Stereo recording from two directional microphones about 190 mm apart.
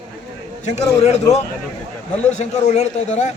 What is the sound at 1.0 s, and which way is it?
A man's voice, 35° left (ahead or behind).